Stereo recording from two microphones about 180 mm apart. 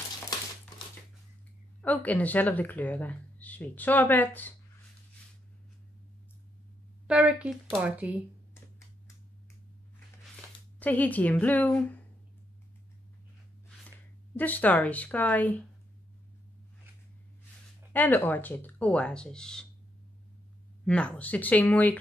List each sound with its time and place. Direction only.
1.8 s speech: 10° left (ahead or behind)
7.1 s speech: 5° right (ahead or behind)
8.5 s a sound: 15° left (ahead or behind)
10.8 s speech: 10° left (ahead or behind)
14.3 s speech: 10° left (ahead or behind)
17.9 s speech: 10° left (ahead or behind)
20.8 s speech: 5° left (ahead or behind)